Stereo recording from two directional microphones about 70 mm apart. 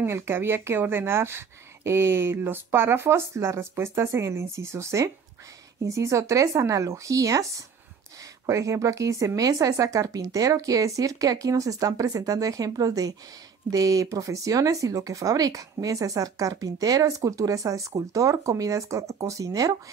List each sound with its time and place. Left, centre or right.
0.0 s speech: right
8.5 s speech: right